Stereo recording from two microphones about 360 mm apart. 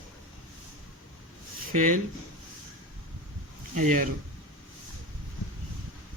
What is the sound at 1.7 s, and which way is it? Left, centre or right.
Speech, right.